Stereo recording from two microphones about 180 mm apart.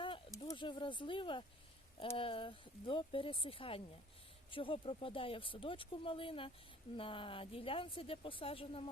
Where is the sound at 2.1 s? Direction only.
30° left (ahead or behind).